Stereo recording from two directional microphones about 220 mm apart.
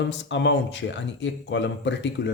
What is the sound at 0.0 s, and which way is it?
Speech, 55° left (ahead or behind).